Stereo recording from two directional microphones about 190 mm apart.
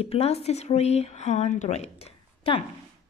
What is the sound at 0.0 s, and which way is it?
Speech, 35° left (ahead or behind).